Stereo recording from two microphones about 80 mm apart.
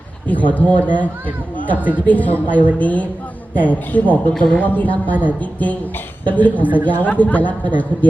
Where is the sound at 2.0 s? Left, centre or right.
Centre.